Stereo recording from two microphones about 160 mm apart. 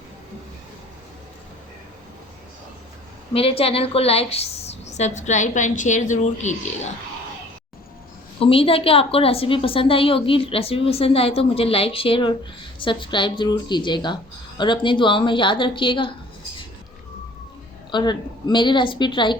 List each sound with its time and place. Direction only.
3.3 s a woman's voice: 35° left (ahead or behind)
8.4 s a woman's voice: 35° left (ahead or behind)
17.9 s a woman's voice: 25° left (ahead or behind)